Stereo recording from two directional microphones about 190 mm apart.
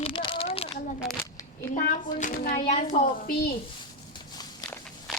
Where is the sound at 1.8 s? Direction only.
45° left (ahead or behind).